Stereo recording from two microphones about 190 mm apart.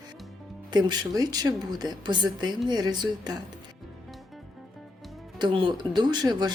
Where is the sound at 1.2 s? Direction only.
20° right (ahead or behind).